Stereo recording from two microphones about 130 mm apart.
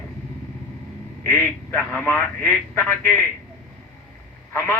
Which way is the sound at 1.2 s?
15° left (ahead or behind).